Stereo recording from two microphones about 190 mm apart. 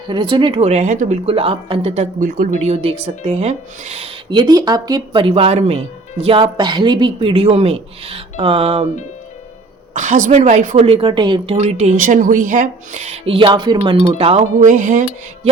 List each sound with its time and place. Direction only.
0.1 s speech: 25° right (ahead or behind)
2.2 s speech: 45° right (ahead or behind)
9.9 s speech: 40° right (ahead or behind)
10.8 s speech: 25° right (ahead or behind)